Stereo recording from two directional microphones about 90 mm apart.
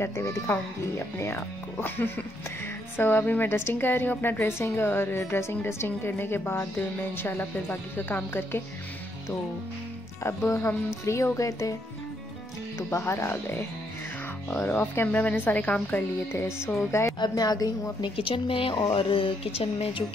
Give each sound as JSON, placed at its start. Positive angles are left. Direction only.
{"t": 0.0, "sound": "a woman's voice", "side_deg": 30}
{"t": 10.2, "sound": "speech", "side_deg": 35}
{"t": 12.7, "sound": "a woman's voice", "side_deg": 35}
{"t": 17.2, "sound": "a woman's voice", "side_deg": 50}
{"t": 18.0, "sound": "a woman's voice", "side_deg": 80}